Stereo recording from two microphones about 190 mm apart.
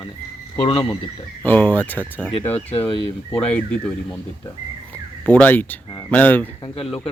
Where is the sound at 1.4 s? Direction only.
10° left (ahead or behind).